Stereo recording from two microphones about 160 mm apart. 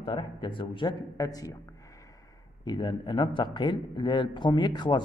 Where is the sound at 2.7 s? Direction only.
30° left (ahead or behind).